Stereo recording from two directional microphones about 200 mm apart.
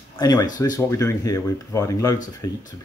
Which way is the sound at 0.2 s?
20° left (ahead or behind).